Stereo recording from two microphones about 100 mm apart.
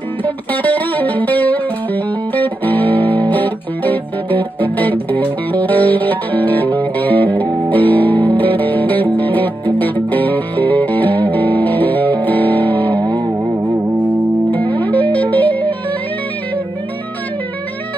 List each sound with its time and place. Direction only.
0.2 s music: 15° left (ahead or behind)
13.3 s music: 15° right (ahead or behind)
14.5 s music: 15° left (ahead or behind)